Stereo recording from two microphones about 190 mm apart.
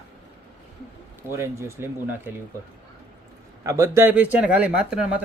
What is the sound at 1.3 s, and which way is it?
Speech, 15° right (ahead or behind).